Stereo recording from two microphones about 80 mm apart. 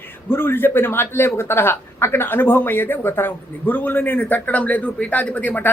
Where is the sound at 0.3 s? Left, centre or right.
Left.